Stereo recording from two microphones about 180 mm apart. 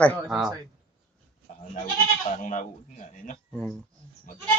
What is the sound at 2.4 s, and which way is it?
Speech, 45° left (ahead or behind).